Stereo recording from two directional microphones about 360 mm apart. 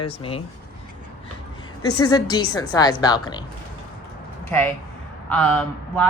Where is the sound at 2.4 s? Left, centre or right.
Left.